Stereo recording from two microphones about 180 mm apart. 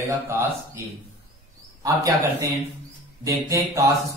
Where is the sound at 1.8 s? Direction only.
20° right (ahead or behind).